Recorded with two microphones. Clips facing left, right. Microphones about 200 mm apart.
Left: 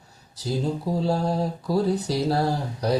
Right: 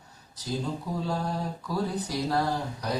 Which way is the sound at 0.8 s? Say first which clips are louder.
Left 7 dB; 35° left (ahead or behind).